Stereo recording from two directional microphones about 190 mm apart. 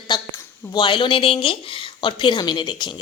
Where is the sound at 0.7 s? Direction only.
25° left (ahead or behind).